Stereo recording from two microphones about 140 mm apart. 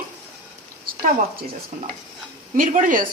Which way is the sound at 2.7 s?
70° right (ahead or behind).